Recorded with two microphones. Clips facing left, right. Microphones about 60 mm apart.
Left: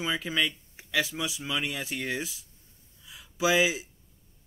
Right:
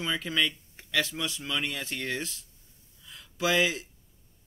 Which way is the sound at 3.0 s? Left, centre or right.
Centre.